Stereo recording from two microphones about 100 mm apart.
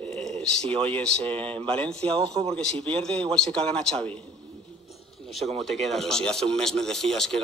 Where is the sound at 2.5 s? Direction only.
10° left (ahead or behind).